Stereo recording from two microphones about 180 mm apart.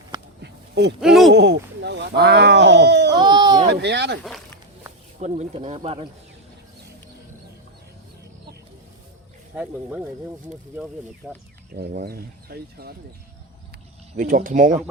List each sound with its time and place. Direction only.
0.4 s a sound: 70° right (ahead or behind)
1.0 s speech: centre (ahead or behind)
1.3 s speech: 75° right (ahead or behind)
3.2 s speech: 25° right (ahead or behind)
3.7 s speech: 70° right (ahead or behind)
5.2 s speech: 35° right (ahead or behind)
9.5 s speech: 10° right (ahead or behind)
11.2 s speech: centre (ahead or behind)
11.7 s speech: 60° right (ahead or behind)
14.2 s speech: 50° right (ahead or behind)